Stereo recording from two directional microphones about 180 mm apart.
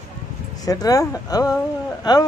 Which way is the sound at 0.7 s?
20° left (ahead or behind).